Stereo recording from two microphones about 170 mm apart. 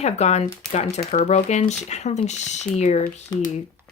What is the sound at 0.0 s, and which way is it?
Speech, 40° left (ahead or behind).